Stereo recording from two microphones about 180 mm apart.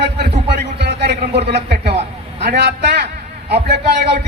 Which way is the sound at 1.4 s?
65° right (ahead or behind).